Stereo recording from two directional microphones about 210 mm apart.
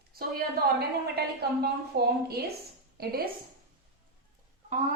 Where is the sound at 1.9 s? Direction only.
50° right (ahead or behind).